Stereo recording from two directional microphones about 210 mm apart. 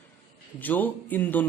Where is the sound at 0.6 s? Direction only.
10° left (ahead or behind).